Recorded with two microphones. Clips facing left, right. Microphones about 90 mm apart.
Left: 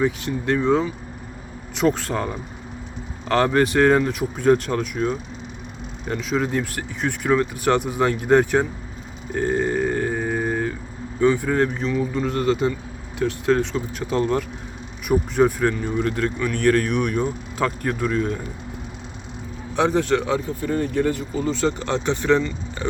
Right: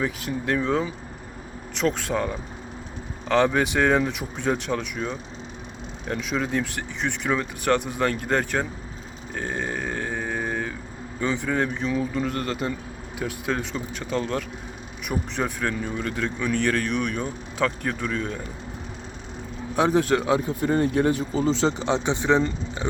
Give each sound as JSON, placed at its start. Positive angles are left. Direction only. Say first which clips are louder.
{"t": 0.0, "sound": "speech", "louder": "left 5 dB", "side_deg": 0}
{"t": 9.3, "sound": "burping", "louder": "left 8 dB", "side_deg": 5}
{"t": 11.2, "sound": "a man's voice", "louder": "left 6 dB", "side_deg": 5}
{"t": 19.7, "sound": "speech", "louder": "left 1 dB", "side_deg": -5}
{"t": 20.5, "sound": "speech", "louder": "right 1 dB", "side_deg": -20}